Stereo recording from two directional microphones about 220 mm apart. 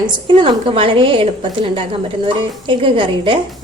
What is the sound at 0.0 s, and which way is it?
A woman's voice, 20° right (ahead or behind).